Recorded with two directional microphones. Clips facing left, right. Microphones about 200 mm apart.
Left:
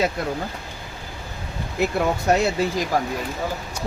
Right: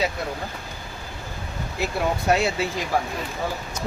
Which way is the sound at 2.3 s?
40° left (ahead or behind).